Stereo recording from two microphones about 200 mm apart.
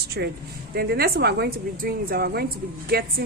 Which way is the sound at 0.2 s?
60° right (ahead or behind).